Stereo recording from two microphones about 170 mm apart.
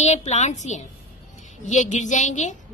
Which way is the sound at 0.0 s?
40° left (ahead or behind).